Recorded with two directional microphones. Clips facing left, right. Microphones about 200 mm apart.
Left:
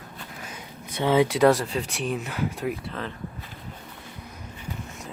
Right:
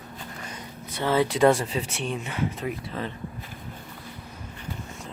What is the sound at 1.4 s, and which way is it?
Speech, centre (ahead or behind).